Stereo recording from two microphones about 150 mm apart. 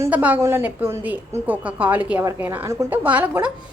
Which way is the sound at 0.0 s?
10° right (ahead or behind).